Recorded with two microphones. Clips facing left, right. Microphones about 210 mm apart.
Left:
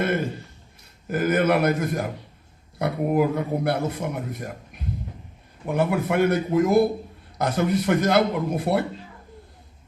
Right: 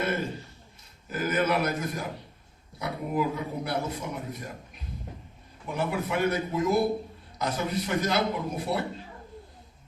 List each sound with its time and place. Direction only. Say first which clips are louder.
1.0 s speech: left 6 dB; 60° left (ahead or behind)